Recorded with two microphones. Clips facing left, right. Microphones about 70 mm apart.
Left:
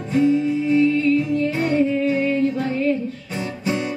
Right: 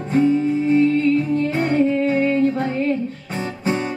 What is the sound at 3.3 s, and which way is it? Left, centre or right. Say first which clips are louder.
Guitar: right 2 dB; right.